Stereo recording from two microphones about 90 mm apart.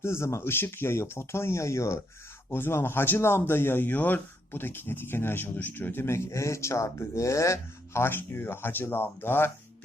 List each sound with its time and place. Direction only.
0.0 s speech: 30° left (ahead or behind)